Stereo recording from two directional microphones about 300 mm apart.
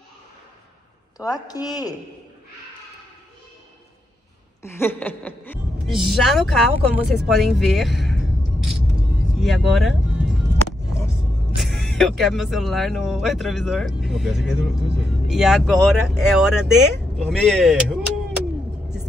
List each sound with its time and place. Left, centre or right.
1.1 s a woman's voice: centre
4.6 s speech: centre
7.2 s music: centre
9.4 s speech: centre
11.5 s speech: centre